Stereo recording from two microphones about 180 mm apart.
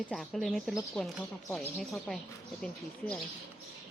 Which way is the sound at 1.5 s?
15° left (ahead or behind).